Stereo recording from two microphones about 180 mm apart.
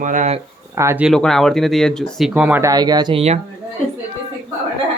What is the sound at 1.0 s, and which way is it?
Speech, centre (ahead or behind).